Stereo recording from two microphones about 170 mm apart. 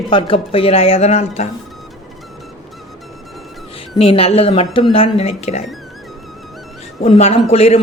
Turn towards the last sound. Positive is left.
turn(degrees=35)  # may be behind; listen again after turning